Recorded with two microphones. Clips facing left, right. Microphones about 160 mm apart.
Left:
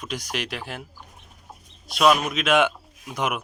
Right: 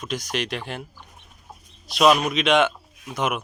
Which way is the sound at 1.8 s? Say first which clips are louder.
Right 2 dB; centre (ahead or behind).